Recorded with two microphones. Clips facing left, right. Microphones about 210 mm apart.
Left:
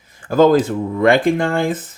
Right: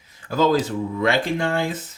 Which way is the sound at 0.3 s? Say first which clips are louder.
Left 7 dB; 50° left (ahead or behind).